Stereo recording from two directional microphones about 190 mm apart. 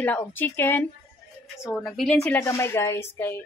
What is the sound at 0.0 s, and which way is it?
A woman's voice, 10° left (ahead or behind).